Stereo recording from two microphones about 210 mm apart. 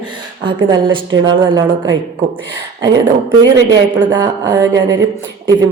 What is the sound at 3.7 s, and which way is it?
Speech, 15° right (ahead or behind).